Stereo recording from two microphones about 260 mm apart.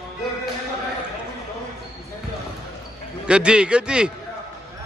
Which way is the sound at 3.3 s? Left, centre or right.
Centre.